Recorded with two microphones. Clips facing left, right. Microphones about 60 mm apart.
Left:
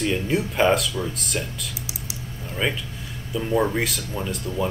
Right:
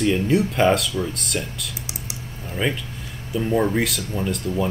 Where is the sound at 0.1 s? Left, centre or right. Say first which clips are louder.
Right 4 dB; centre.